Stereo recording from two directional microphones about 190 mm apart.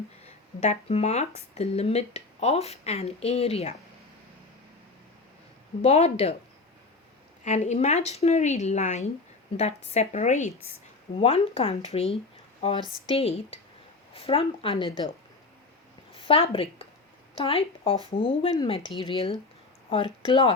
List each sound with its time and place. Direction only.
0.3 s a woman's voice: 35° left (ahead or behind)
5.8 s a woman's voice: 35° left (ahead or behind)
7.4 s a woman's voice: 35° left (ahead or behind)
16.1 s a woman's voice: 30° left (ahead or behind)